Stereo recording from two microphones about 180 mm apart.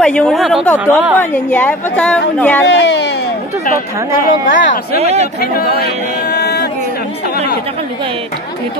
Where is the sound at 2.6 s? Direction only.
75° left (ahead or behind).